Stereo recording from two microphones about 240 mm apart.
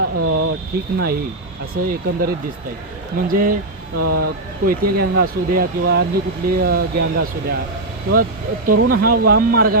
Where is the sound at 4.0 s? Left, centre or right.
Right.